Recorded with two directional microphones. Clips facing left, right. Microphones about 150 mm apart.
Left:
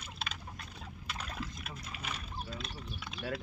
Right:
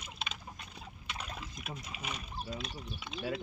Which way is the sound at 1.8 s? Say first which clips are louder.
Right 1 dB; 10° right (ahead or behind).